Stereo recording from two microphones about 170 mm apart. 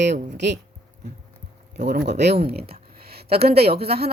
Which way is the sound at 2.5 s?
65° right (ahead or behind).